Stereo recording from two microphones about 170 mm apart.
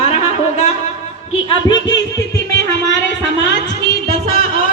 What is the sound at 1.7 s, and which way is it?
Speech, 90° left.